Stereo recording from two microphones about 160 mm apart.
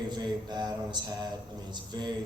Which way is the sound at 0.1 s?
25° right (ahead or behind).